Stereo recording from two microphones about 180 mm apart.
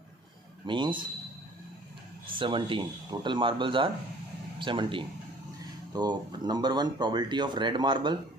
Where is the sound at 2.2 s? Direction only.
30° right (ahead or behind).